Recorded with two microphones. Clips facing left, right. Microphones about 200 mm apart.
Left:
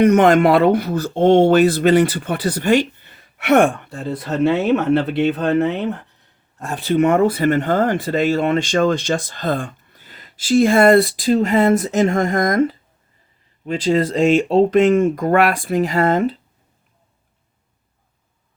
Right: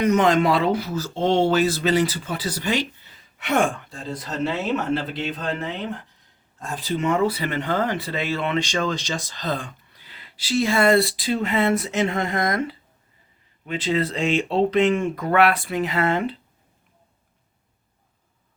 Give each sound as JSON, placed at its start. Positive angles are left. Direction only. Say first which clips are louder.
{"t": 0.0, "sound": "speech", "louder": "left 6 dB", "side_deg": 60}